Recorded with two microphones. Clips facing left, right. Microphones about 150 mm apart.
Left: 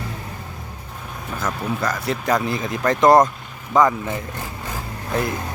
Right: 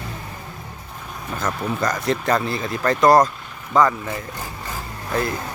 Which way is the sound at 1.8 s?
5° left (ahead or behind).